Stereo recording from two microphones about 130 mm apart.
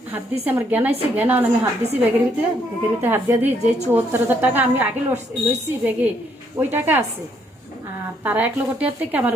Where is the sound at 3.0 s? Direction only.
15° right (ahead or behind).